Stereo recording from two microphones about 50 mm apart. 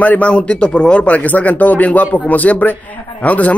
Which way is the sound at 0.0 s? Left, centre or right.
Left.